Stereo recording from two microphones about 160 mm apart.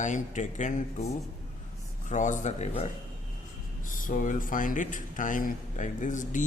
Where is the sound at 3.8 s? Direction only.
55° left (ahead or behind).